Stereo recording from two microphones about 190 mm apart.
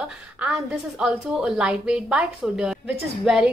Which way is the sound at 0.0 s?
5° right (ahead or behind).